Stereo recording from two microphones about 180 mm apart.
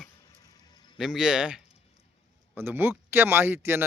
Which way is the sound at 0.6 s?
25° left (ahead or behind).